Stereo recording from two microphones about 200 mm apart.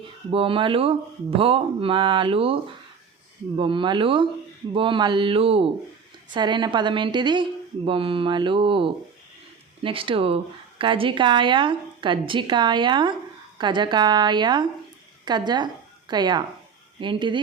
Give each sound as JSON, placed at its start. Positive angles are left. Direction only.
{"t": 0.0, "sound": "speech", "side_deg": -25}
{"t": 3.6, "sound": "a woman's voice", "side_deg": -25}